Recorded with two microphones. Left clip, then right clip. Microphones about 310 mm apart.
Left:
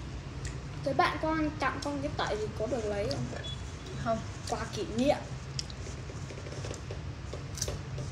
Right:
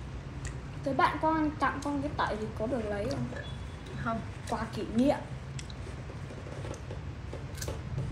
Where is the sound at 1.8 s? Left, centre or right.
Centre.